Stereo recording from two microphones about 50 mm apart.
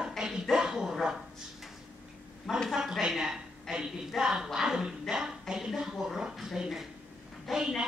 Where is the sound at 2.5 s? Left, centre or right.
Centre.